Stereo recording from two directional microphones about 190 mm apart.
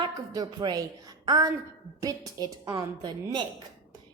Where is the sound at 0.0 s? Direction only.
20° right (ahead or behind).